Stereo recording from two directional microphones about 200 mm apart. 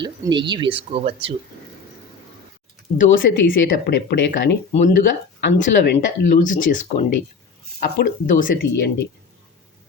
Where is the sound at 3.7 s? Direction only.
50° left (ahead or behind).